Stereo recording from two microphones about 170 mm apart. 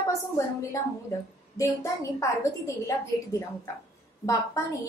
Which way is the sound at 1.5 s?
15° left (ahead or behind).